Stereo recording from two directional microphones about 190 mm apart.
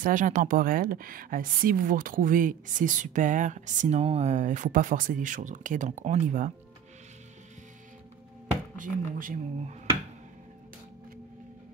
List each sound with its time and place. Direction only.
0.0 s speech: 45° right (ahead or behind)
8.7 s speech: 45° right (ahead or behind)